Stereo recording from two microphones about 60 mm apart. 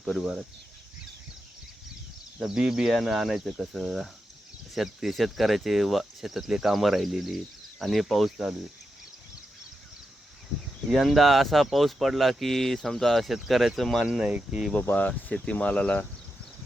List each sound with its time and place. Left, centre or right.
0.0 s speech: centre
2.4 s speech: centre
2.9 s speech: centre
10.9 s speech: centre
14.3 s speech: centre
14.9 s speech: left